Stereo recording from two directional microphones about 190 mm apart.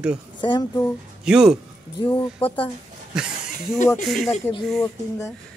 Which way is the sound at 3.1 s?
5° right (ahead or behind).